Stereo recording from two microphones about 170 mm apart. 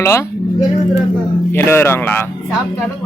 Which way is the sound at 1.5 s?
15° left (ahead or behind).